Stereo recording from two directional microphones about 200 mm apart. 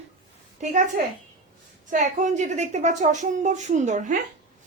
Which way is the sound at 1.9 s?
40° right (ahead or behind).